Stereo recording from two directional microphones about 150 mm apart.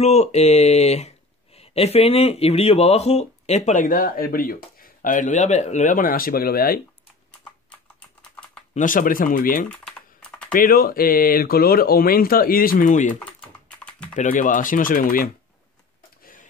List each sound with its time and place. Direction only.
0.0 s speech: 45° left (ahead or behind); by 6.8 s 85° left
7.7 s typing: 5° left (ahead or behind)
8.7 s speech: 65° left (ahead or behind)
9.7 s typing: 5° left (ahead or behind)
10.5 s speech: 75° left (ahead or behind); by 13.2 s 55° left (ahead or behind)
13.2 s typing: 5° left (ahead or behind)
14.1 s speech: 60° left (ahead or behind); by 15.3 s 75° left (ahead or behind)